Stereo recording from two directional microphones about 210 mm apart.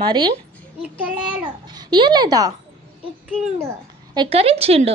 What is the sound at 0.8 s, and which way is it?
Child singing, 5° right (ahead or behind).